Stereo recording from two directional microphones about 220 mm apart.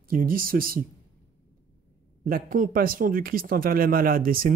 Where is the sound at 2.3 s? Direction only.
40° right (ahead or behind).